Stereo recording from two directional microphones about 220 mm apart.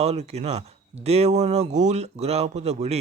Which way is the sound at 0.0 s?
30° right (ahead or behind).